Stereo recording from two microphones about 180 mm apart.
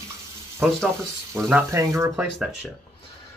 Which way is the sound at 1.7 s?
15° right (ahead or behind).